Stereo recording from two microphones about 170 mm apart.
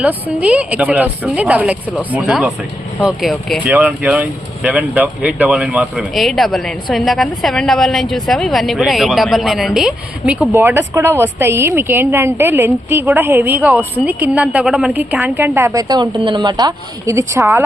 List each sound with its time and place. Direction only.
0.1 s a woman's voice: 10° right (ahead or behind)